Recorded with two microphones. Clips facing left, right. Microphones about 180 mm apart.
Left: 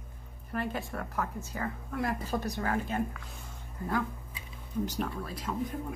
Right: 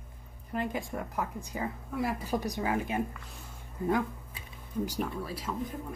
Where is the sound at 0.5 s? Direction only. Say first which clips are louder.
Right 1 dB; 15° right (ahead or behind).